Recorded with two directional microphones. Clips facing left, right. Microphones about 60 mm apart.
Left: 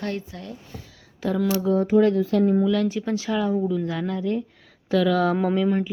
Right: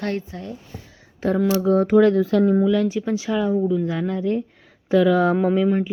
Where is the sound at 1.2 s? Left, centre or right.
Right.